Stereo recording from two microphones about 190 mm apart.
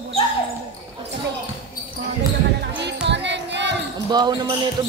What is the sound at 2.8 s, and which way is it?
Music, 65° right (ahead or behind).